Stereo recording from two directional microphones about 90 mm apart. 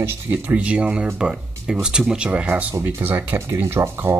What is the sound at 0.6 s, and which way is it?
Speech, 10° right (ahead or behind).